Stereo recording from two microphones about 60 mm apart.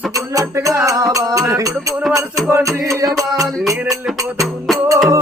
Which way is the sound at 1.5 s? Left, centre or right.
Right.